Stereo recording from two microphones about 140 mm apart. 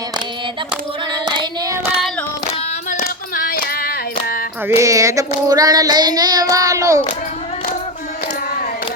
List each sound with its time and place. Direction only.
1.2 s hands: 30° right (ahead or behind)
2.9 s child singing: 85° left
4.7 s child singing: 20° right (ahead or behind)